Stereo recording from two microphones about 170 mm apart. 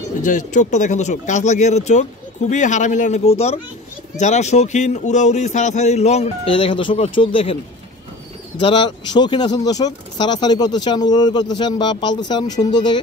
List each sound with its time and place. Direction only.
0.2 s a man's voice: 50° left (ahead or behind); by 7.5 s 35° left (ahead or behind)
8.5 s speech: 30° left (ahead or behind)